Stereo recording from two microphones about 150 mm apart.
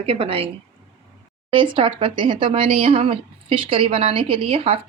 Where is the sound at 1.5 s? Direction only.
35° right (ahead or behind).